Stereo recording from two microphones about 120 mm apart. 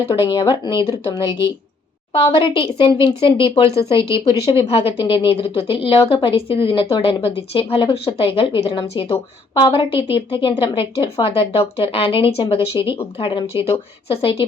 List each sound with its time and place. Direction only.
0.1 s speech: 40° left (ahead or behind)